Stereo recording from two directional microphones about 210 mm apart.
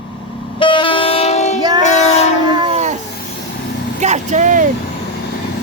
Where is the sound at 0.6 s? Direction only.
25° left (ahead or behind).